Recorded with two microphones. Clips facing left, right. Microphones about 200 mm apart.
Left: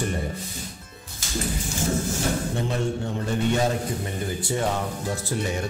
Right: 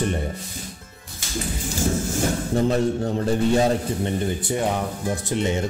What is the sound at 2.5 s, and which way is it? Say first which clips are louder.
A man's voice: right 6 dB; 35° right (ahead or behind).